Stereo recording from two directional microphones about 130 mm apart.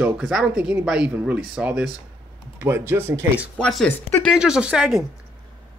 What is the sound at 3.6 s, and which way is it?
Speech, 5° left (ahead or behind).